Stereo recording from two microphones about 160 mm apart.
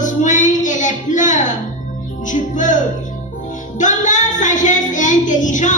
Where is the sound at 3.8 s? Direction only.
50° left (ahead or behind).